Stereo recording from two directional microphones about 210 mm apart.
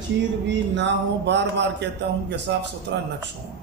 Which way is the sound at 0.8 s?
55° right (ahead or behind).